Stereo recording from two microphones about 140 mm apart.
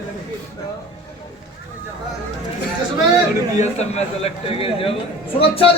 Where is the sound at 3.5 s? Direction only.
55° left (ahead or behind).